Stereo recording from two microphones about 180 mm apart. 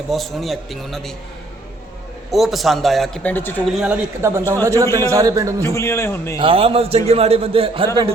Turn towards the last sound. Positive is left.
turn(degrees=-30)  # may be behind; listen again after turning